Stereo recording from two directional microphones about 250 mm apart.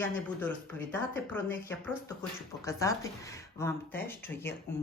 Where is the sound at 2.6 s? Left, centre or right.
Centre.